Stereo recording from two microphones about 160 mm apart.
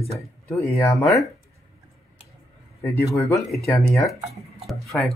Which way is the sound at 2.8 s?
15° left (ahead or behind).